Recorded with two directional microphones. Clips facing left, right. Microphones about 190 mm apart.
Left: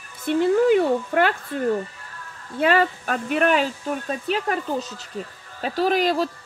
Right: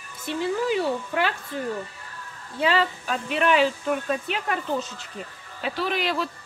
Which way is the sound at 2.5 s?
55° left (ahead or behind).